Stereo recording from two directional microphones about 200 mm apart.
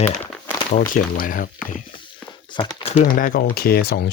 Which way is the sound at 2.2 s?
25° left (ahead or behind).